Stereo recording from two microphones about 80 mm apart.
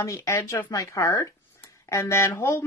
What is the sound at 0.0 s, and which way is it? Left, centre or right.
A woman's voice, left.